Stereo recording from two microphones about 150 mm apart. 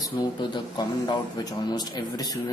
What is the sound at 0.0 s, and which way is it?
Speech, 30° left (ahead or behind).